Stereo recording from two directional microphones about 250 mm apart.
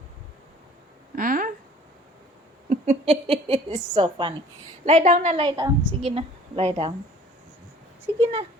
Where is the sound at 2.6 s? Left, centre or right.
Right.